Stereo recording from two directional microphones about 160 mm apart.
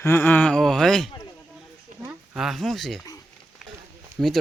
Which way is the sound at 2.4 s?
Centre (ahead or behind).